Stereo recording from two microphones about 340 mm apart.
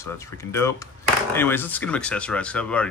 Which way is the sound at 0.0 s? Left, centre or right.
Centre.